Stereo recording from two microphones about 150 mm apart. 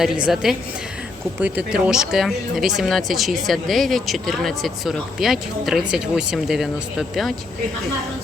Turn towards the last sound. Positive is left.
turn(degrees=0)  # may be behind; listen again after turning